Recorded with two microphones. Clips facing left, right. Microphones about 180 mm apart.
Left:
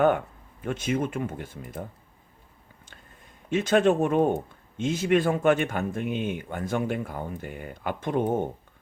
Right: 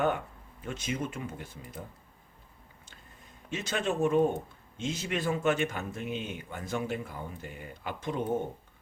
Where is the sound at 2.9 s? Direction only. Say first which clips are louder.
Left 5 dB; 60° left (ahead or behind).